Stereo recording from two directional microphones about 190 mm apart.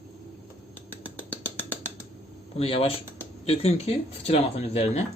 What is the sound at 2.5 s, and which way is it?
Speech, 30° left (ahead or behind).